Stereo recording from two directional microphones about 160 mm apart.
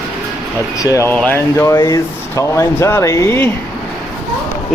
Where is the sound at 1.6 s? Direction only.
20° left (ahead or behind).